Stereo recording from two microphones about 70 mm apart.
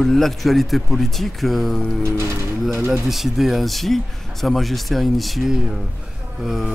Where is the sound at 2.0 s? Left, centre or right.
Right.